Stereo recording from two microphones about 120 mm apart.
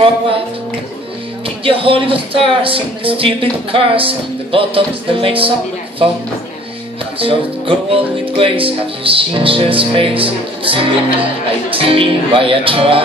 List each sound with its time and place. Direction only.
1.6 s speech: 50° right (ahead or behind)
7.2 s speech: 50° right (ahead or behind)